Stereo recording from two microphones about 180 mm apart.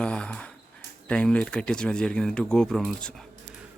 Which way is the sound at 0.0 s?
5° left (ahead or behind).